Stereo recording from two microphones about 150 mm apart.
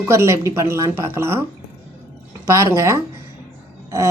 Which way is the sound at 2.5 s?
20° right (ahead or behind).